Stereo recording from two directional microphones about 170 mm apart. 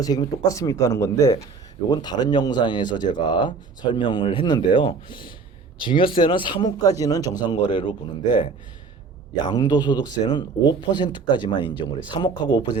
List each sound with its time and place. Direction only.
0.0 s speech: 20° left (ahead or behind)